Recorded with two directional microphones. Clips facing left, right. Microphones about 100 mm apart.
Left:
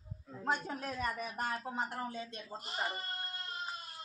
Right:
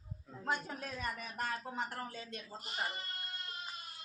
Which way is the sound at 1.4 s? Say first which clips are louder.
Even; 25° left (ahead or behind).